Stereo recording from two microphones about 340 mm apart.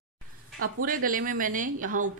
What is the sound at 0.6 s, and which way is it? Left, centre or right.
A woman's voice, right.